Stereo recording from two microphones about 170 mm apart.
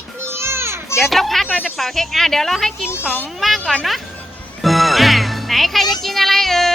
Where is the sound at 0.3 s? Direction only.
15° right (ahead or behind).